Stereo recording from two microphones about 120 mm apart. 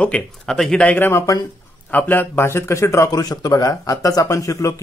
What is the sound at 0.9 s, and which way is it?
Speech, 20° left (ahead or behind).